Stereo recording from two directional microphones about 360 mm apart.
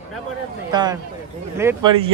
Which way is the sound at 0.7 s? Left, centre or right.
Centre.